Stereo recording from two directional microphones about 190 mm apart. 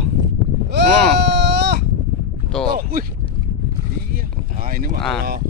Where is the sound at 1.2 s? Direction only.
65° right (ahead or behind).